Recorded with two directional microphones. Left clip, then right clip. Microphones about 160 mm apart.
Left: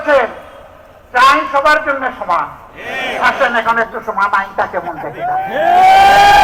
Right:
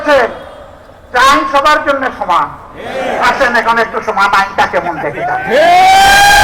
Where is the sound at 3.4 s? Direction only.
35° right (ahead or behind).